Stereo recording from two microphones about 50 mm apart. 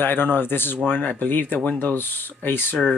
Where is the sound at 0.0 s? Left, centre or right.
Left.